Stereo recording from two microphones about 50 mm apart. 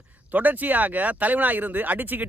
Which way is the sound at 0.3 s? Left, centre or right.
Right.